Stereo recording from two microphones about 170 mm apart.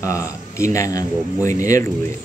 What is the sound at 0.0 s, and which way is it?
A man's voice, 20° left (ahead or behind).